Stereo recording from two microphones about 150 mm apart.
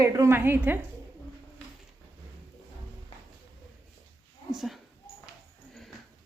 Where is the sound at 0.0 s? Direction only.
20° right (ahead or behind).